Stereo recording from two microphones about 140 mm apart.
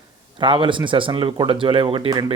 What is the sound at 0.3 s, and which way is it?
Speech, 35° right (ahead or behind).